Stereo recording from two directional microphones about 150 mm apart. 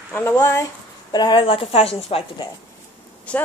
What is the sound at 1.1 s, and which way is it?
A woman's voice, 30° left (ahead or behind).